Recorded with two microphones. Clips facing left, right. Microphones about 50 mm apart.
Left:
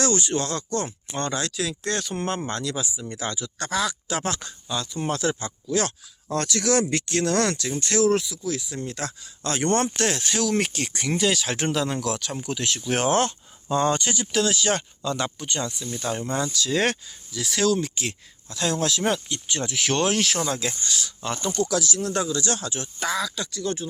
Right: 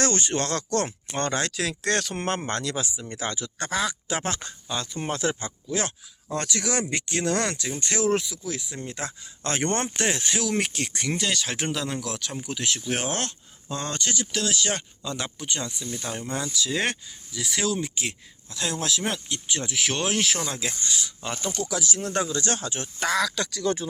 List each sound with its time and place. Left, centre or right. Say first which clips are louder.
0.0 s speech: left 1 dB; right
1.0 s speech: right 1 dB; right
2.1 s speech: even; right
6.3 s speech: left 5 dB; centre
8.7 s speech: left 3 dB; centre
9.4 s speech: left 3 dB; right; by 13.3 s centre
13.7 s speech: left 8 dB; centre
21.7 s speech: left 3 dB; right
23.1 s speech: right 3 dB; right